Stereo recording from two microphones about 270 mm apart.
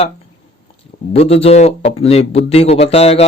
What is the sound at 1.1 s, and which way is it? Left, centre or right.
Speech, left.